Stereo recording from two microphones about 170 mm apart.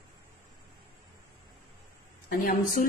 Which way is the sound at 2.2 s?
55° left (ahead or behind).